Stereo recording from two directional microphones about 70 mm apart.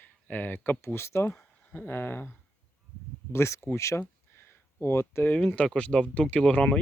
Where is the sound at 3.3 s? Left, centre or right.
Left.